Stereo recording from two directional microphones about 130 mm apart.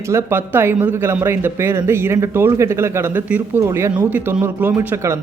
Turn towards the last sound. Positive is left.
turn(degrees=-15)  # may be behind; listen again after turning